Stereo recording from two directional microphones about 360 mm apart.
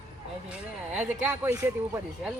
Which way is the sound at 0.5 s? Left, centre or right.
Centre.